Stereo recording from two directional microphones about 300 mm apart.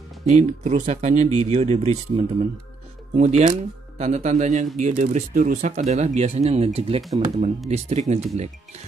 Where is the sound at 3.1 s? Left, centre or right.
Right.